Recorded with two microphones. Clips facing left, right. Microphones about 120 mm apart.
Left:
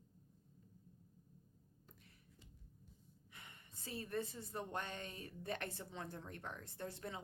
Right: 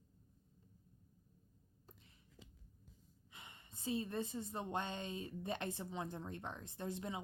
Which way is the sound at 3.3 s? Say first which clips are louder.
Right 2 dB; 20° right (ahead or behind).